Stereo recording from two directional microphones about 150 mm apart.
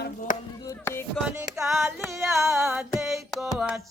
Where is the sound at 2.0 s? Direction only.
15° right (ahead or behind).